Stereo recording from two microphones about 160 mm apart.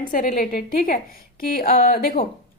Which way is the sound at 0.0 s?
55° left (ahead or behind).